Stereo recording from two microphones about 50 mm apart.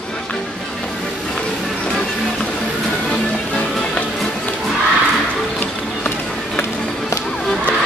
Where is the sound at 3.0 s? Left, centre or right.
Centre.